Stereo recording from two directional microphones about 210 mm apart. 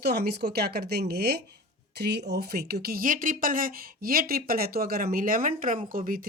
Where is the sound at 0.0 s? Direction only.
50° right (ahead or behind).